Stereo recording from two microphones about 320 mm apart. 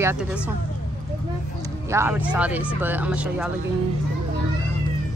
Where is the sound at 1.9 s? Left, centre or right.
Centre.